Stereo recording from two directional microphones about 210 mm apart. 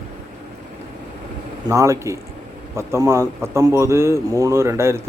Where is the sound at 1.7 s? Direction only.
15° right (ahead or behind).